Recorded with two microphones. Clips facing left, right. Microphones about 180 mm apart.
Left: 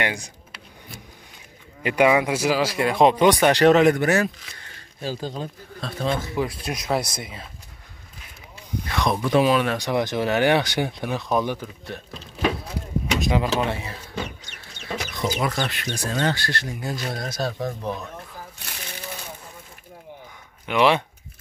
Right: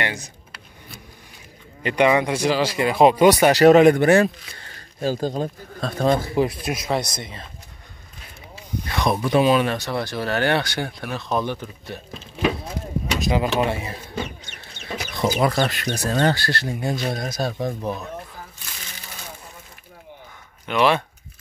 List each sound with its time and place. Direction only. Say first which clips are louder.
0.0 s speech: left 1 dB; 15° left (ahead or behind)
1.8 s speech: even; 10° left (ahead or behind); by 3.8 s 5° right (ahead or behind)
3.8 s speech: right 4 dB; 30° right (ahead or behind)
5.0 s speech: right 6 dB; 45° right (ahead or behind); by 6.5 s 30° right (ahead or behind)
6.6 s speech: right 1 dB; 5° right (ahead or behind)
8.8 s speech: right 1 dB; 5° right (ahead or behind)
9.8 s speech: left 3 dB; 15° left (ahead or behind)
11.8 s speech: right 1 dB; centre (ahead or behind)
13.6 s speech: right 3 dB; 15° right (ahead or behind)
15.2 s speech: right 5 dB; 35° right (ahead or behind)
16.8 s speech: right 5 dB; 25° right (ahead or behind)
20.6 s speech: even; 15° left (ahead or behind)